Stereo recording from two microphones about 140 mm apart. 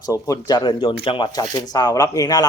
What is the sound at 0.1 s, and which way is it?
Speech, 25° left (ahead or behind).